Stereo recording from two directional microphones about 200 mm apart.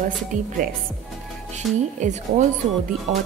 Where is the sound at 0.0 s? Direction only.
40° right (ahead or behind).